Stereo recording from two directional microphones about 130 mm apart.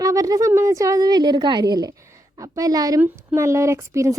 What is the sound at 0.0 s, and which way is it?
A woman's voice, 25° right (ahead or behind).